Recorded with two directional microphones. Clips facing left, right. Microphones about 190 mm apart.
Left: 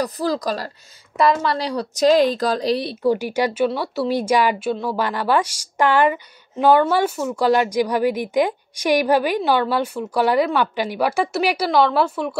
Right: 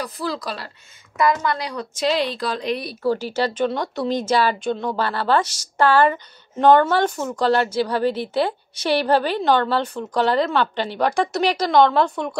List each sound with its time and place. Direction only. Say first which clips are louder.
0.0 s a woman's voice: left 5 dB; 40° left (ahead or behind)
1.1 s a woman's voice: left 2 dB; 30° left (ahead or behind)
3.0 s a woman's voice: even; 15° left (ahead or behind)